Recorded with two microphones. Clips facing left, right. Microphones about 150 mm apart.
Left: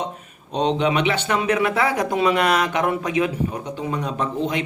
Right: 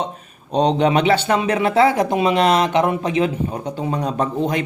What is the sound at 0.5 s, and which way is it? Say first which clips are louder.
A man's voice: right 4 dB; 40° right (ahead or behind).